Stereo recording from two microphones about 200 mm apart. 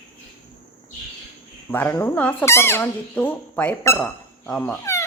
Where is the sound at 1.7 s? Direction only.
10° left (ahead or behind).